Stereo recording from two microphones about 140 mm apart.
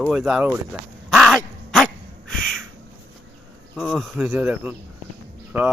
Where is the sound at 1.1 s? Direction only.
Centre (ahead or behind).